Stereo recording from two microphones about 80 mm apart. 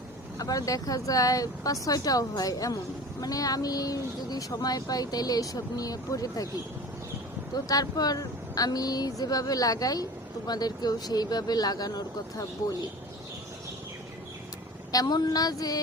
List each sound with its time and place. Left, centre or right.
0.3 s speech: left
7.5 s speech: left
14.9 s speech: left